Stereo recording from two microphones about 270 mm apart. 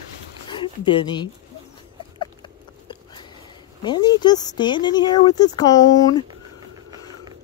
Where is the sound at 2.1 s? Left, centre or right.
Centre.